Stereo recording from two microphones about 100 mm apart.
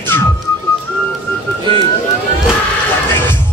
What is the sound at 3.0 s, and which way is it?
Music, 20° left (ahead or behind).